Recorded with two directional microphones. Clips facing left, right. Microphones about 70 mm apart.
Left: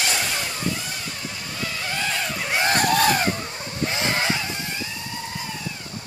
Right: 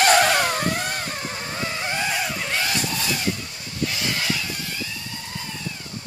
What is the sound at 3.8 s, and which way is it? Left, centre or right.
Vehicle, left.